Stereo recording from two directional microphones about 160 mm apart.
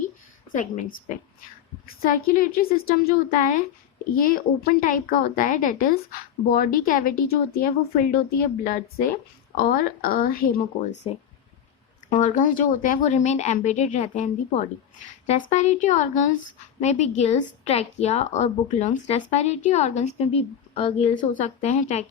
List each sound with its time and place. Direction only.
0.5 s a woman's voice: 55° left (ahead or behind)
12.1 s a woman's voice: 50° left (ahead or behind); by 21.2 s 35° left (ahead or behind)
21.2 s a woman's voice: 50° left (ahead or behind)